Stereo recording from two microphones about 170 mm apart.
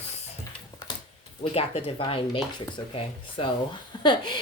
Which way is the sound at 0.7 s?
25° left (ahead or behind).